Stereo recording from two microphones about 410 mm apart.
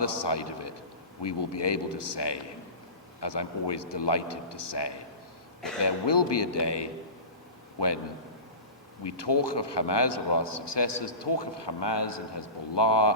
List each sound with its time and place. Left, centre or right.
0.0 s a man's voice: left
5.8 s a man's voice: left
9.0 s a man's voice: left